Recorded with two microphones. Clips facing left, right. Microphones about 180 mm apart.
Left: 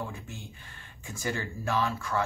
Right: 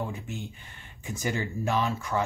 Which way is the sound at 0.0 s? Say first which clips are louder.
Right 4 dB; 20° right (ahead or behind).